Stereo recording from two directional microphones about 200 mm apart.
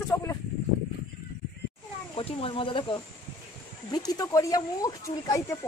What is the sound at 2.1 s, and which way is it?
Speech, 25° left (ahead or behind).